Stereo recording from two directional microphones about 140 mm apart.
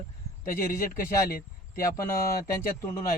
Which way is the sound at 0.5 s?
80° left.